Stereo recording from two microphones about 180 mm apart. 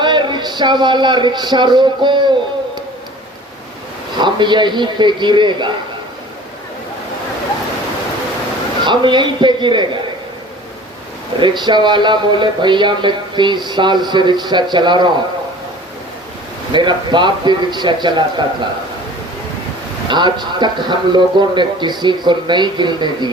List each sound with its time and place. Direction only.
0.0 s speech: 25° right (ahead or behind)
4.2 s speech: 25° right (ahead or behind)
8.8 s speech: 25° right (ahead or behind)
11.3 s speech: 25° right (ahead or behind)
16.7 s speech: 25° right (ahead or behind)
20.1 s speech: 25° right (ahead or behind)